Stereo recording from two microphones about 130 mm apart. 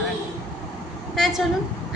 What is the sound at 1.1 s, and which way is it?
Speech, centre (ahead or behind).